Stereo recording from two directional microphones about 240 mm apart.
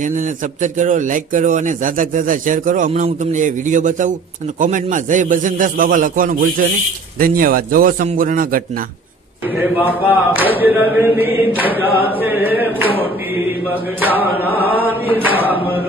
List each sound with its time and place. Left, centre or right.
0.0 s a man's voice: right
9.6 s chant: centre
14.0 s chant: centre